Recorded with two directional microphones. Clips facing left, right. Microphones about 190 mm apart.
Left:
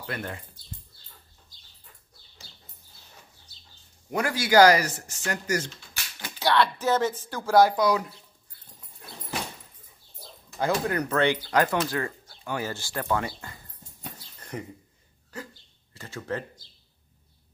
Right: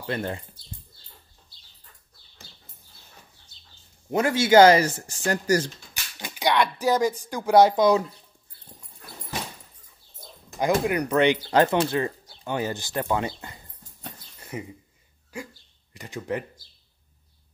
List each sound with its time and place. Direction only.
0.0 s speech: 25° right (ahead or behind)
4.1 s speech: 25° right (ahead or behind)
6.1 s speech: 15° right (ahead or behind)
10.6 s speech: 15° right (ahead or behind)
14.4 s speech: 5° right (ahead or behind)